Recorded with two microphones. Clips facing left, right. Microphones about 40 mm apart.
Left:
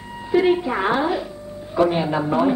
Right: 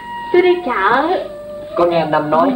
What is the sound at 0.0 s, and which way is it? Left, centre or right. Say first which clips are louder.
Speech: right 6 dB; right.